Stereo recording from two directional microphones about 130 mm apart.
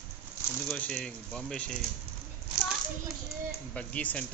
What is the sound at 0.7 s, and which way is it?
Speech, 5° left (ahead or behind).